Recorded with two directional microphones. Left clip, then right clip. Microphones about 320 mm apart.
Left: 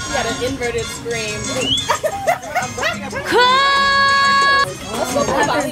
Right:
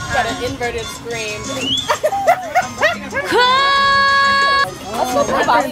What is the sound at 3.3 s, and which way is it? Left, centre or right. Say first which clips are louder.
Music: even; centre.